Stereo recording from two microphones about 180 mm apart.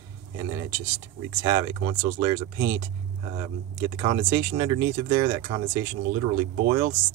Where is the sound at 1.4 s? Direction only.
25° right (ahead or behind).